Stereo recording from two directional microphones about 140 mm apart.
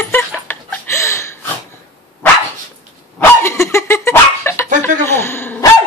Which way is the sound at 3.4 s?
20° left (ahead or behind).